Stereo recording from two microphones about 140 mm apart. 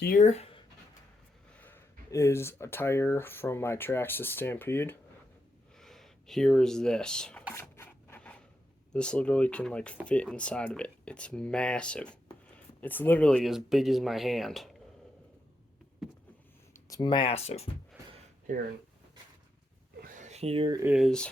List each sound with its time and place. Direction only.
0.0 s speech: 90° left
0.3 s speech: 45° left (ahead or behind)
1.5 s speech: 15° left (ahead or behind)
5.8 s speech: centre (ahead or behind)
7.5 s filing: 15° left (ahead or behind)
8.9 s speech: 5° left (ahead or behind)
13.4 s speech: centre (ahead or behind)
16.7 s speech: 30° left (ahead or behind); by 17.7 s 45° left (ahead or behind)
20.0 s a sound: 70° right (ahead or behind); by 20.7 s 40° right (ahead or behind)
20.8 s speech: 5° right (ahead or behind)